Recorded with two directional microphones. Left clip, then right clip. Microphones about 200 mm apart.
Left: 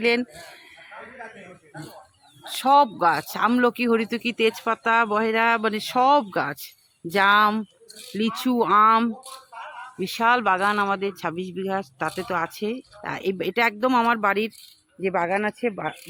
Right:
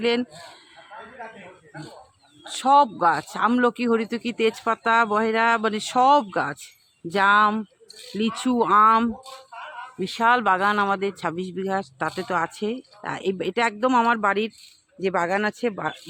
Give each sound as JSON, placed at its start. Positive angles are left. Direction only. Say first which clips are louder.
{"t": 0.0, "sound": "speech", "louder": "left 1 dB", "side_deg": 0}
{"t": 2.5, "sound": "speech", "louder": "even", "side_deg": 0}
{"t": 9.5, "sound": "a sound", "louder": "even", "side_deg": 45}
{"t": 10.0, "sound": "speech", "louder": "right 1 dB", "side_deg": 0}